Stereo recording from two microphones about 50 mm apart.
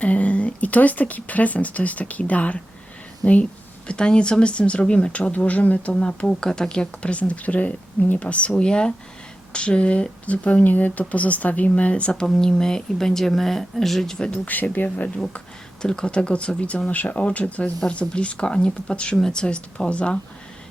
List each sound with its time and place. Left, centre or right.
0.0 s speech: left
12.2 s speech: centre
14.4 s speech: left
14.9 s speech: left
15.8 s speech: centre